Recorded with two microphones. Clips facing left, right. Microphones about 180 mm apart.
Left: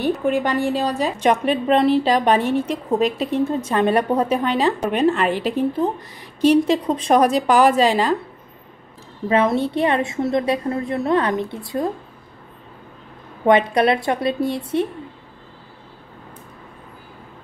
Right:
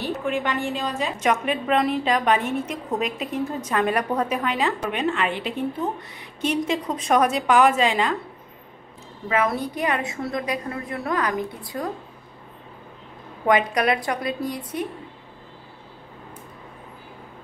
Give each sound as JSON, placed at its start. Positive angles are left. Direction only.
{"t": 0.3, "sound": "a woman's voice", "side_deg": 40}
{"t": 9.3, "sound": "a woman's voice", "side_deg": 25}
{"t": 13.5, "sound": "a woman's voice", "side_deg": 30}